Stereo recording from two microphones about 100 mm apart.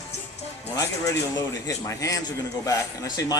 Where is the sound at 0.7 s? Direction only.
35° left (ahead or behind).